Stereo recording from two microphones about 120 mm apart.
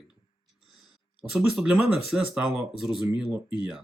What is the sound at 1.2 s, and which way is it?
Speech, 5° right (ahead or behind).